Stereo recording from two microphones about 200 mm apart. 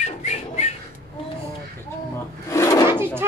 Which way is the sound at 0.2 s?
35° left (ahead or behind).